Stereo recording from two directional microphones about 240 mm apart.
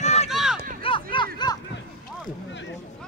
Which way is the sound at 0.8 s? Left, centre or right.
Left.